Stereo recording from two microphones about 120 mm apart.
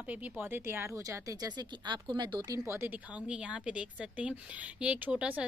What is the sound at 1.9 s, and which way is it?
Speech, 40° right (ahead or behind).